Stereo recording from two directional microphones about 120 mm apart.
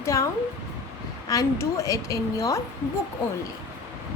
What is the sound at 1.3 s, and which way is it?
A woman's voice, 25° left (ahead or behind).